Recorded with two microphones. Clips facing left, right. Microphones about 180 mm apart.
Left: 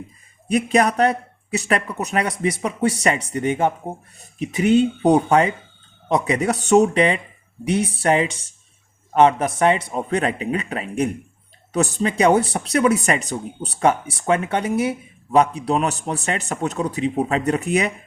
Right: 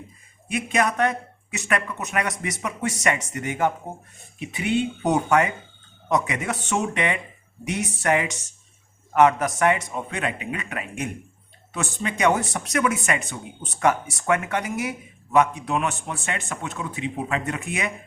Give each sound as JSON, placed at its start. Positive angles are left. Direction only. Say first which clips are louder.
{"t": 0.4, "sound": "speech", "louder": "left 6 dB", "side_deg": 35}
{"t": 4.4, "sound": "speech", "louder": "left 8 dB", "side_deg": 40}